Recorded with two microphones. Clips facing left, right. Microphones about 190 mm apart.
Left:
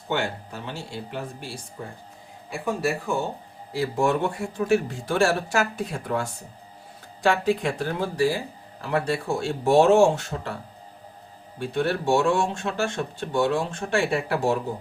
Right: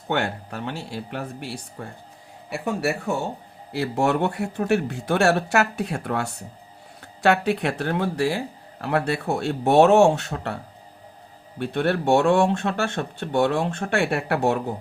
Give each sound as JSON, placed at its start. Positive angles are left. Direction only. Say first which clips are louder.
{"t": 0.1, "sound": "speech", "louder": "right 2 dB", "side_deg": -60}
{"t": 11.6, "sound": "speech", "louder": "right 2 dB", "side_deg": -60}